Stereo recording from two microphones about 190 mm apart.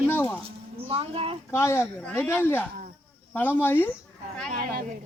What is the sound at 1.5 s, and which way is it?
Speech, 15° left (ahead or behind).